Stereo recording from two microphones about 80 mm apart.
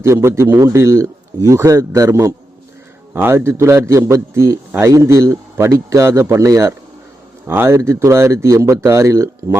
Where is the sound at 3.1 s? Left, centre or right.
Right.